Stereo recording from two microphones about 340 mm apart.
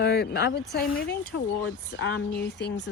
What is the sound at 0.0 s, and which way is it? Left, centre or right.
A woman's voice, left.